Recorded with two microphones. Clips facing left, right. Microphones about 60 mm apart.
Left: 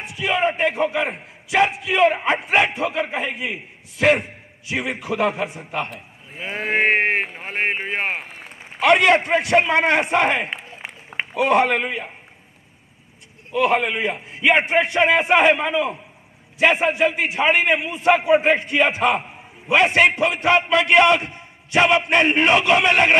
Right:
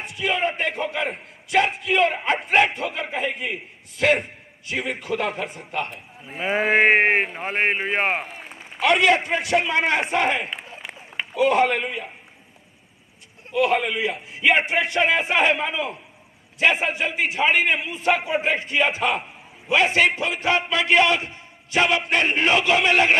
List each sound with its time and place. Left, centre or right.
0.3 s a man's voice: left
2.2 s speech: left
2.8 s a man's voice: left
5.9 s a man's voice: centre
8.8 s a man's voice: left
13.5 s a man's voice: left